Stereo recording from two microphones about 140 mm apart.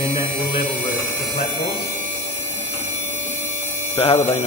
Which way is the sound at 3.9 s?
40° left (ahead or behind).